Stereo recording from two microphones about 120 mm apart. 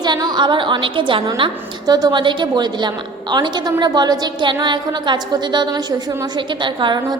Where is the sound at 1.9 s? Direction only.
35° right (ahead or behind).